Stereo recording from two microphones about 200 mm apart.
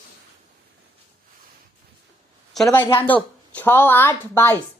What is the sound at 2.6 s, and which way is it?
Speech, 10° left (ahead or behind).